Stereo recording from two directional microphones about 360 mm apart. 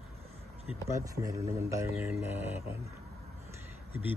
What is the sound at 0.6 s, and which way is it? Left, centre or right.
Speech, centre.